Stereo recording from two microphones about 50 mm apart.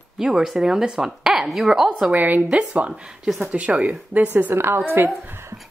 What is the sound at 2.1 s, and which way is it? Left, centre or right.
A woman's voice, right.